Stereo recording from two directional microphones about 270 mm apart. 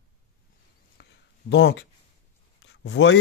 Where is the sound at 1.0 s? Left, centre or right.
Left.